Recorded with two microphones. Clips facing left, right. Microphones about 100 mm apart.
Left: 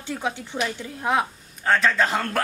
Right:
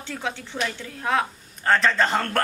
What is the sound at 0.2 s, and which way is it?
Speech, 15° left (ahead or behind).